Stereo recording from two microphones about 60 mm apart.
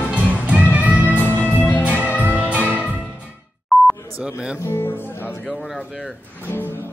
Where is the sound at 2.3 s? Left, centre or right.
Right.